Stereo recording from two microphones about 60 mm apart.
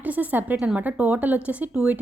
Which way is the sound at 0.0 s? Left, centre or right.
Right.